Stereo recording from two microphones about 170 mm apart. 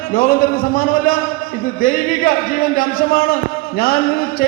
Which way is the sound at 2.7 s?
55° left (ahead or behind).